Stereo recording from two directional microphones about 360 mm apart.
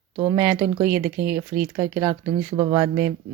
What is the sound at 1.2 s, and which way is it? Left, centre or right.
Speech, right.